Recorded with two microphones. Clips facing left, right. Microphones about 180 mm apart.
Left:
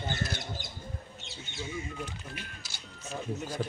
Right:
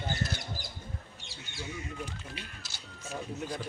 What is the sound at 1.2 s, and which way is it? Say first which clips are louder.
Squawk: left 3 dB; 20° left (ahead or behind).